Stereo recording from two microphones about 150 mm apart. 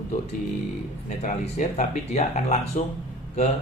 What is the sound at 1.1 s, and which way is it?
Speech, 45° left (ahead or behind).